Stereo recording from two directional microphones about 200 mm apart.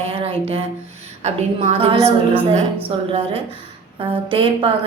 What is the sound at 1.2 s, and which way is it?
A woman's voice, 30° right (ahead or behind).